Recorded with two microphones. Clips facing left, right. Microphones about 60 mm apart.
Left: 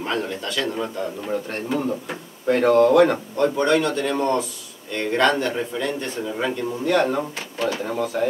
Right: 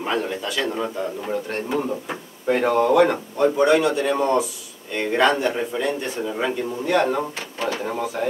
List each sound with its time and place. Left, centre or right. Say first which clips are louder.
0.0 s a man's voice: right 1 dB; centre
7.5 s speech: left 2 dB; right
7.8 s a man's voice: left 2 dB; centre